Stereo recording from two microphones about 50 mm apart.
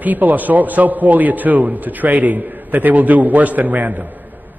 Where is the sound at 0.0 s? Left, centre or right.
Right.